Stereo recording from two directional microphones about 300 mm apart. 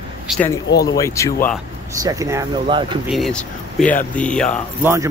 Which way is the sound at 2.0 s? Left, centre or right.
Centre.